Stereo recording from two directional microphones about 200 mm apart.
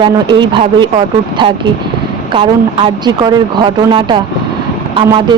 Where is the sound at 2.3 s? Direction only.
25° right (ahead or behind).